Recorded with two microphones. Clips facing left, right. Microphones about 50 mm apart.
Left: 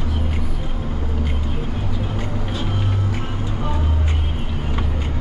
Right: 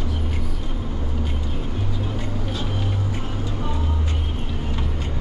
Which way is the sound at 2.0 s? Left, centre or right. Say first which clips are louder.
Left 2 dB; left.